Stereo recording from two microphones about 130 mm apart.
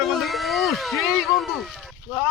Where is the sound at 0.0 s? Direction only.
Centre (ahead or behind).